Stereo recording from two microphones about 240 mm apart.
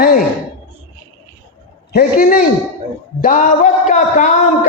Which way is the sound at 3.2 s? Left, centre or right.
Left.